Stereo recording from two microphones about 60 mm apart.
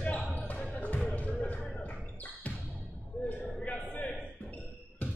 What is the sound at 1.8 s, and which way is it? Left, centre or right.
Basketball bounce, left.